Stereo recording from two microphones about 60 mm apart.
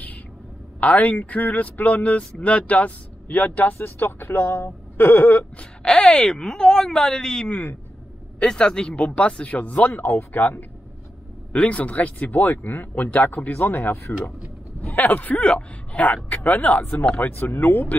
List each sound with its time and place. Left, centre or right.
0.7 s speech: left
5.6 s speech: centre; by 10.6 s left
11.5 s speech: left